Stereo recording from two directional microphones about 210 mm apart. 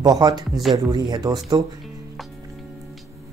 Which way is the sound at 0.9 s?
20° right (ahead or behind).